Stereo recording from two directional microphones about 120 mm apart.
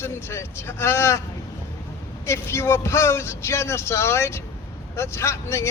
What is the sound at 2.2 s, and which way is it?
A man's voice, 20° left (ahead or behind).